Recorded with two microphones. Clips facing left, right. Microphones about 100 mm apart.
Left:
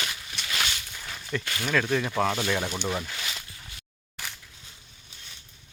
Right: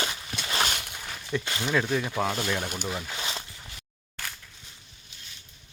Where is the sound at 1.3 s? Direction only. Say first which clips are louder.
Even; 20° right (ahead or behind).